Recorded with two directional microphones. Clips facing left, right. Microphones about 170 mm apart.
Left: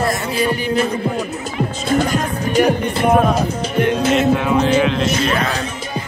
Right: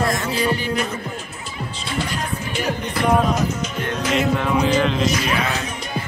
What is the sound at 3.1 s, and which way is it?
Music, 55° left (ahead or behind).